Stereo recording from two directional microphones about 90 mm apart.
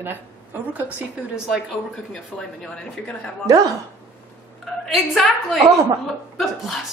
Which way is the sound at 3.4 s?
45° right (ahead or behind).